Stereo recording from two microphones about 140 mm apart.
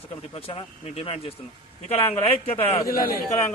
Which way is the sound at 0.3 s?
45° left (ahead or behind).